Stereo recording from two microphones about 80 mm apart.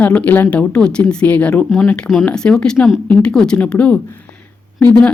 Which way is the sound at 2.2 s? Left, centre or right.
Centre.